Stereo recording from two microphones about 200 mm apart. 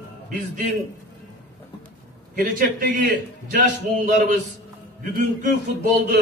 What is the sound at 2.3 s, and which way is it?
A man's voice, 45° right (ahead or behind).